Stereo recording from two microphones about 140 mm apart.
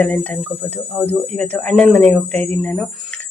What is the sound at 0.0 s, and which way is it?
Speech, 10° left (ahead or behind).